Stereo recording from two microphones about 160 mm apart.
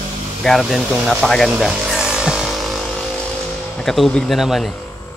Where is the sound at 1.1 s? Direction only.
Centre (ahead or behind).